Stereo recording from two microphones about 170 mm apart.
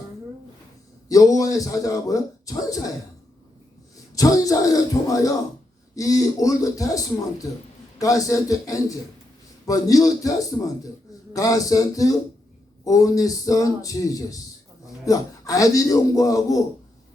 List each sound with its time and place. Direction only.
1.0 s speech: 20° left (ahead or behind)
4.1 s speech: 20° left (ahead or behind)
11.3 s a man's voice: 20° left (ahead or behind)